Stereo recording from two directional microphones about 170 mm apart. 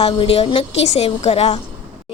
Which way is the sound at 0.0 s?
35° left (ahead or behind).